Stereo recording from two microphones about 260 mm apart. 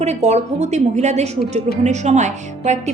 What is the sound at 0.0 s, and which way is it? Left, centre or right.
A woman's voice, right.